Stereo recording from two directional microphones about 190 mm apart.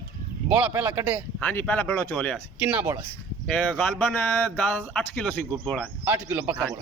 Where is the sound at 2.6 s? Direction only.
10° right (ahead or behind).